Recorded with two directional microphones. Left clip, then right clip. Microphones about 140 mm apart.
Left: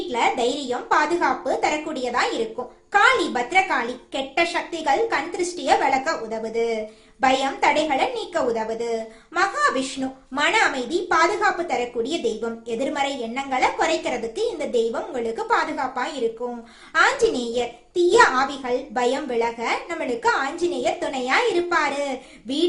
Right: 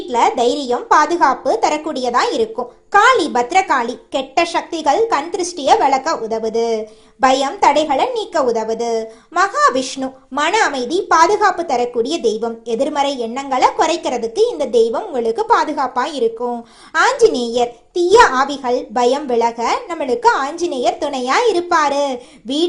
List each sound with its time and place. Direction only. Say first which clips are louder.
0.1 s a woman's voice: right 8 dB; 40° right (ahead or behind)